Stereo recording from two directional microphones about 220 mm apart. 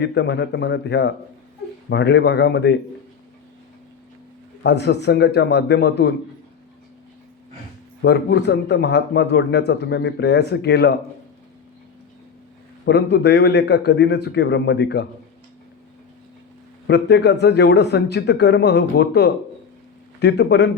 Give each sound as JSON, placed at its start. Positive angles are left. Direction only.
{"t": 0.0, "sound": "a man's voice", "side_deg": 50}
{"t": 4.6, "sound": "a man's voice", "side_deg": 50}
{"t": 8.0, "sound": "a man's voice", "side_deg": 50}
{"t": 12.8, "sound": "a man's voice", "side_deg": 50}
{"t": 16.8, "sound": "a man's voice", "side_deg": 50}